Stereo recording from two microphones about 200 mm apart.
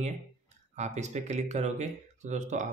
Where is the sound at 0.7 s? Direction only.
35° right (ahead or behind).